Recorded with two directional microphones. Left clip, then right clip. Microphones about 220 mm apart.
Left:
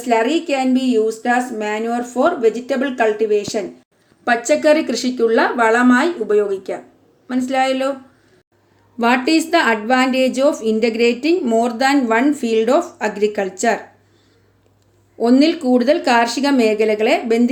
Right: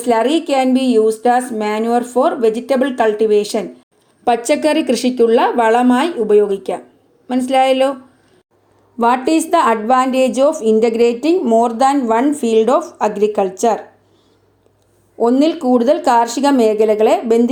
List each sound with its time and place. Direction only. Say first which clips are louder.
0.0 s a woman's voice: right 2 dB; 30° right (ahead or behind)
9.0 s a woman's voice: right 2 dB; 20° right (ahead or behind)
15.2 s a woman's voice: right 1 dB; 15° right (ahead or behind)